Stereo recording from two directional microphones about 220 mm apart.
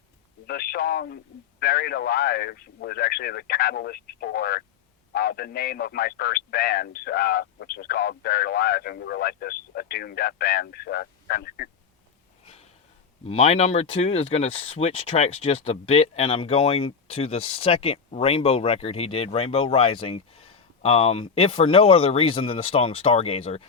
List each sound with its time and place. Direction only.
0.4 s a man's voice: 45° left (ahead or behind)
13.2 s speech: 30° left (ahead or behind)